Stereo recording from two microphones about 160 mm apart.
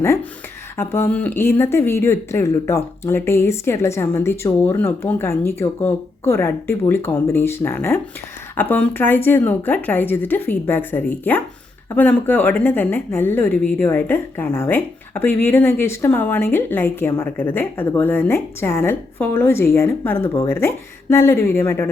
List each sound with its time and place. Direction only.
0.0 s speech: 15° left (ahead or behind)